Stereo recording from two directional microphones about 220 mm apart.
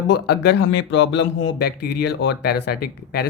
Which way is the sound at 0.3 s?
55° left (ahead or behind).